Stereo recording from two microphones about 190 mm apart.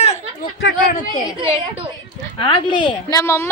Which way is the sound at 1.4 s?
30° right (ahead or behind).